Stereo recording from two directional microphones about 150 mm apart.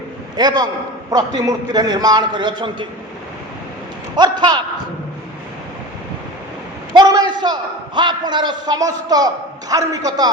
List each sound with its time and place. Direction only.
0.3 s a man's voice: 30° right (ahead or behind)
4.1 s a man's voice: 30° right (ahead or behind)
6.9 s a man's voice: 25° right (ahead or behind)